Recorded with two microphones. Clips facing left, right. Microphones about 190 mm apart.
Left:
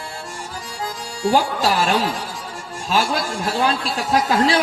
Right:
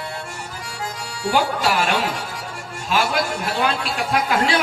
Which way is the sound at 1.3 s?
30° left (ahead or behind).